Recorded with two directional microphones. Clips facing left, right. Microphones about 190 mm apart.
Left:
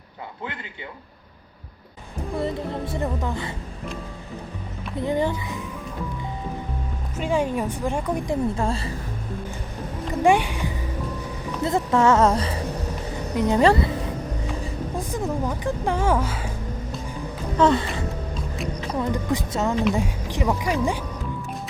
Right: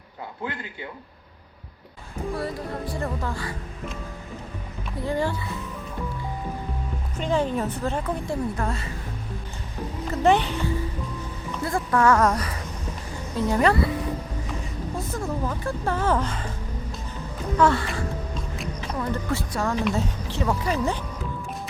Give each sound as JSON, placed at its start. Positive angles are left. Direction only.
{"t": 2.3, "sound": "speech", "side_deg": 20}
{"t": 4.9, "sound": "speech", "side_deg": 20}
{"t": 7.2, "sound": "a woman's voice", "side_deg": 10}
{"t": 8.5, "sound": "speech", "side_deg": 30}
{"t": 10.2, "sound": "a woman's voice", "side_deg": 10}
{"t": 11.6, "sound": "speech", "side_deg": 20}
{"t": 14.9, "sound": "a woman's voice", "side_deg": 15}
{"t": 17.6, "sound": "a woman's voice", "side_deg": 20}